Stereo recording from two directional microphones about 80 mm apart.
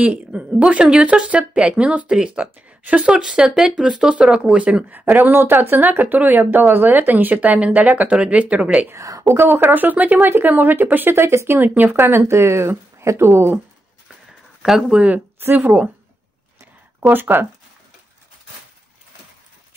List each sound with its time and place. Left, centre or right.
0.0 s speech: centre
2.5 s a sound: centre
3.0 s speech: centre
8.9 s speech: right
14.6 s speech: centre; by 15.9 s right
17.0 s speech: right